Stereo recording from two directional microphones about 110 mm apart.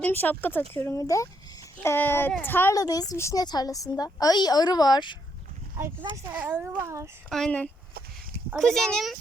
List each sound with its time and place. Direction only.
0.0 s speech: 15° left (ahead or behind)
2.7 s a woman's voice: 35° left (ahead or behind)
6.3 s a child's voice: 15° right (ahead or behind)
7.3 s speech: 5° left (ahead or behind)